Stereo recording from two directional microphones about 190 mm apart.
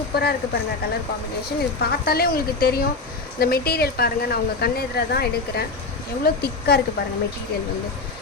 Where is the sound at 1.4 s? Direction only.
55° left (ahead or behind).